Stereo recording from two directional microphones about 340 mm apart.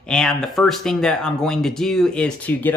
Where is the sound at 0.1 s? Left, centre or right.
Centre.